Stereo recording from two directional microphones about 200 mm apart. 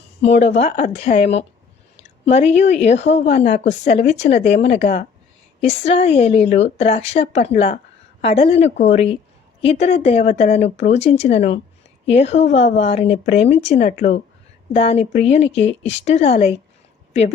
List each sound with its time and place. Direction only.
0.3 s speech: 35° left (ahead or behind)